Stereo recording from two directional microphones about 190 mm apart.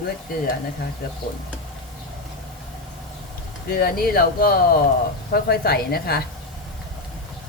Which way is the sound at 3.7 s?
55° left (ahead or behind).